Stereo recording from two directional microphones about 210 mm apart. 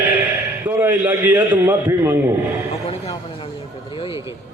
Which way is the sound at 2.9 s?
25° left (ahead or behind).